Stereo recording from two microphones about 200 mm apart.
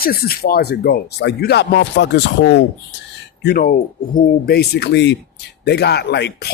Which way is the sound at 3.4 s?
50° left (ahead or behind).